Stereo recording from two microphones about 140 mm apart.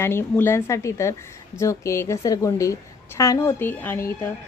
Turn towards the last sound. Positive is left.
turn(degrees=15)  # may be behind; listen again after turning